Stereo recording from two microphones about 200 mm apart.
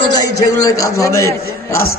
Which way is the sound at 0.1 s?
20° left (ahead or behind).